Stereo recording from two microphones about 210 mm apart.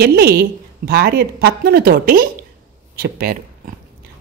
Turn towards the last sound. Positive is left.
turn(degrees=-45)  # may be behind; listen again after turning